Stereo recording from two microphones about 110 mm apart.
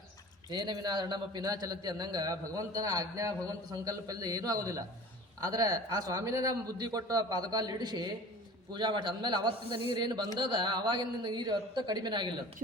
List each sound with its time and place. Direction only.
0.5 s a man's voice: 40° right (ahead or behind)